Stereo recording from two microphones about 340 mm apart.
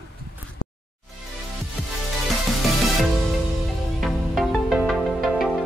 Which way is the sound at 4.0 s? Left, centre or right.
Centre.